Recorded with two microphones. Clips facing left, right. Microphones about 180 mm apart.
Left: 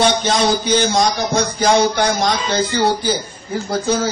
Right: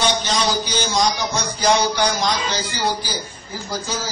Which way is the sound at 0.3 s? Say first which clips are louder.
Left 6 dB; 55° left (ahead or behind).